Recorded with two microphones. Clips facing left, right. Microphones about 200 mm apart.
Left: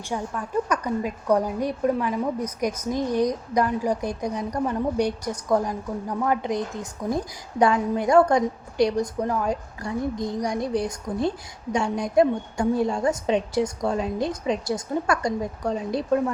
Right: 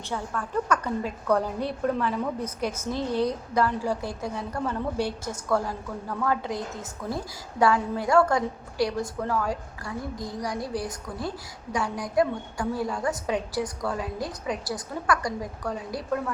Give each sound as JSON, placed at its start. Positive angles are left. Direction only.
{"t": 0.1, "sound": "a woman's voice", "side_deg": 15}